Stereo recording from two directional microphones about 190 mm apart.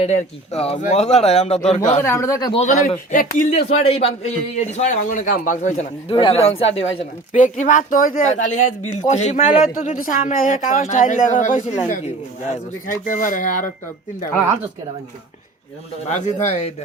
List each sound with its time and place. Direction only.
0.0 s a man's voice: 35° left (ahead or behind)
2.0 s a man's voice: 15° left (ahead or behind)
2.5 s a man's voice: 35° left (ahead or behind)
3.5 s a man's voice: 35° left (ahead or behind)
16.0 s a man's voice: 35° left (ahead or behind)